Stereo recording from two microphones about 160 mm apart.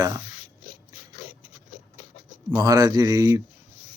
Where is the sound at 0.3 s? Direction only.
45° left (ahead or behind).